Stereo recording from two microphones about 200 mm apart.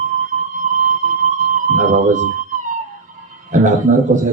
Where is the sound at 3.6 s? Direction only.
40° right (ahead or behind).